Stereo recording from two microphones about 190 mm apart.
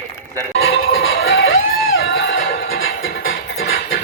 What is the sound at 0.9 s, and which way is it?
Music, 90° left.